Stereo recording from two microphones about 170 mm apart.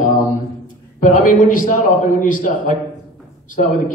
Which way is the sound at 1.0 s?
50° left (ahead or behind).